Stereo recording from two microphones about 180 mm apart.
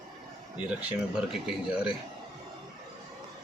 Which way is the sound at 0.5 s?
5° right (ahead or behind).